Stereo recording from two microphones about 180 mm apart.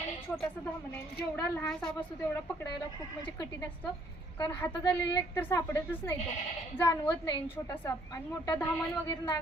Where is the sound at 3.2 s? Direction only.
15° left (ahead or behind).